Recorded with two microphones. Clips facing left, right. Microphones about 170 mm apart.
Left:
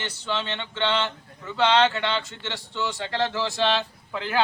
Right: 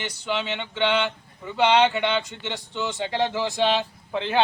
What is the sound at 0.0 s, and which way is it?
Speech, 15° right (ahead or behind).